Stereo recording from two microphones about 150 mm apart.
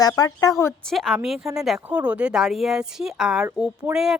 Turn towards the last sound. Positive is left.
turn(degrees=-5)  # may be behind; listen again after turning